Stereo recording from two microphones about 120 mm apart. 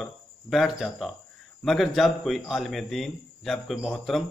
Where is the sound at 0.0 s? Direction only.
Centre (ahead or behind).